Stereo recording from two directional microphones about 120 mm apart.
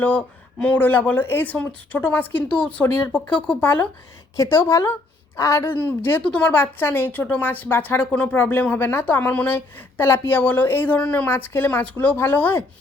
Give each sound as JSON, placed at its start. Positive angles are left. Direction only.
{"t": 0.0, "sound": "a woman's voice", "side_deg": 15}